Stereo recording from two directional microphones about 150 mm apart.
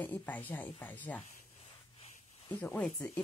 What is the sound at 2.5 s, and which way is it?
Speech, 10° left (ahead or behind).